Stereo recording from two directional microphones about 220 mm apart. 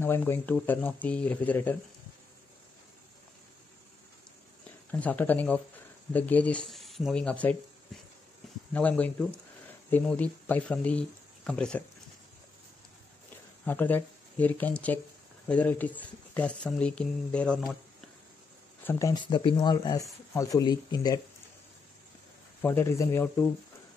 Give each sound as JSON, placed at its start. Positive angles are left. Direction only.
{"t": 0.0, "sound": "speech", "side_deg": 10}
{"t": 4.9, "sound": "speech", "side_deg": 5}
{"t": 8.7, "sound": "speech", "side_deg": 5}
{"t": 13.7, "sound": "speech", "side_deg": 10}
{"t": 18.9, "sound": "speech", "side_deg": 15}
{"t": 22.6, "sound": "speech", "side_deg": 10}